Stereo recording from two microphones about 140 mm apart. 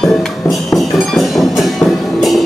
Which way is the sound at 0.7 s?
Centre (ahead or behind).